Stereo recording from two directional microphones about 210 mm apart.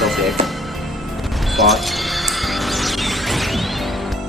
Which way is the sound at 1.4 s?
Centre (ahead or behind).